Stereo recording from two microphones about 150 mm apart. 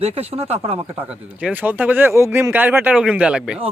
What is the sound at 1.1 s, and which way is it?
Speech, 10° right (ahead or behind).